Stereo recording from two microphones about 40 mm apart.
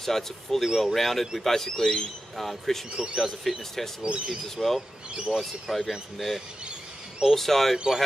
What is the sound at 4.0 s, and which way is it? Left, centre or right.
Speech, right.